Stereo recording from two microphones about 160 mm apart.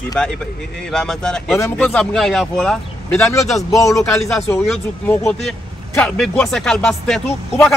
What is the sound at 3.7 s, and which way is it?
Speech, 20° left (ahead or behind).